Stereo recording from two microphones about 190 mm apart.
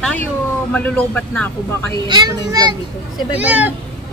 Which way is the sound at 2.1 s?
20° right (ahead or behind).